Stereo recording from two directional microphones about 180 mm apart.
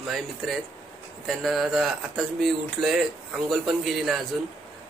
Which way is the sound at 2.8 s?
25° right (ahead or behind).